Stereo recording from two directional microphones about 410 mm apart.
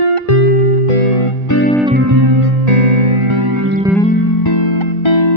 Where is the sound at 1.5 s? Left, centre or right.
Left.